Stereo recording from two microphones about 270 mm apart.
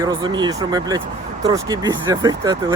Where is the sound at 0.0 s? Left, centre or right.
Centre.